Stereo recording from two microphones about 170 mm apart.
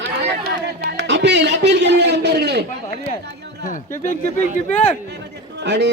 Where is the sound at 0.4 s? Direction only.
70° right (ahead or behind).